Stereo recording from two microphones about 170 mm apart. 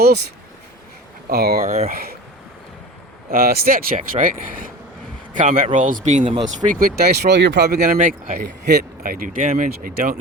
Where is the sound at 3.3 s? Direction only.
60° right (ahead or behind); by 7.8 s 75° right (ahead or behind).